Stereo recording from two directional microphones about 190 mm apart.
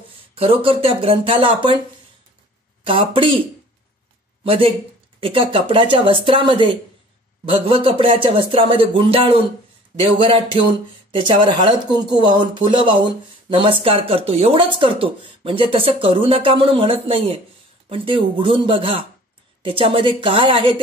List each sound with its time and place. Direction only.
0.3 s speech: 30° right (ahead or behind)
2.8 s speech: 30° right (ahead or behind)
4.5 s speech: 30° right (ahead or behind)